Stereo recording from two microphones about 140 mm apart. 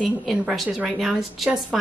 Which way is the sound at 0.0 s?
Centre (ahead or behind).